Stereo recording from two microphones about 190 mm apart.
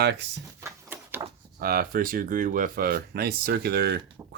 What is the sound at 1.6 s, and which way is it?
Speech, 50° right (ahead or behind).